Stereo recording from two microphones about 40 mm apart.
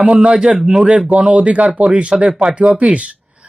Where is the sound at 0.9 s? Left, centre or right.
Right.